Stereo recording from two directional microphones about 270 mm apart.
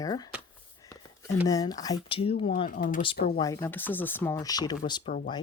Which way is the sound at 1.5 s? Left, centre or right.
Centre.